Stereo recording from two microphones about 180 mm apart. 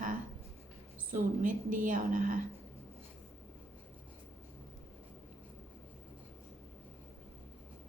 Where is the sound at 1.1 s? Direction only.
50° right (ahead or behind).